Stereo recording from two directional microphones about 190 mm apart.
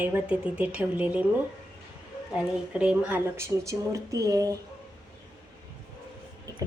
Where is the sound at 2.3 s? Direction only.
5° right (ahead or behind).